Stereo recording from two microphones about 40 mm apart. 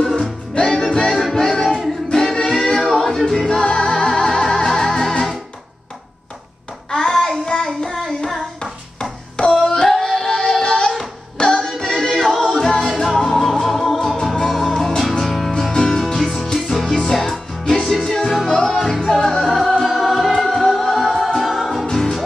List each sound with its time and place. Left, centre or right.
0.7 s music: centre
6.9 s music: centre
7.6 s child singing: centre
8.4 s hands: centre
9.5 s music: centre
15.5 s music: centre
18.5 s music: centre
18.8 s music: centre